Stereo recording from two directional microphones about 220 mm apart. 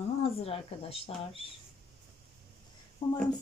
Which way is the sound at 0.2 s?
25° left (ahead or behind).